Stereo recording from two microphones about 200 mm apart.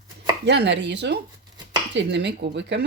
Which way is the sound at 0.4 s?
55° right (ahead or behind).